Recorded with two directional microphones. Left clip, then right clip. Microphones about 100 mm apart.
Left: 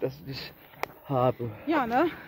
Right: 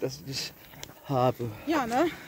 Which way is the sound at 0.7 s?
25° right (ahead or behind).